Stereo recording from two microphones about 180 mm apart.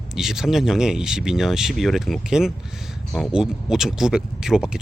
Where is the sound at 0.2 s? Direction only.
Centre (ahead or behind).